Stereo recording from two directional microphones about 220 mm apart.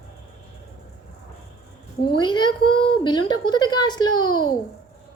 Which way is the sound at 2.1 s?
20° left (ahead or behind).